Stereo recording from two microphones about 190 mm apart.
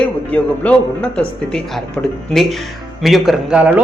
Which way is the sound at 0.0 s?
5° left (ahead or behind).